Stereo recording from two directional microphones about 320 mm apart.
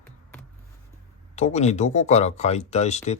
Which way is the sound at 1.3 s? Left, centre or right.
Left.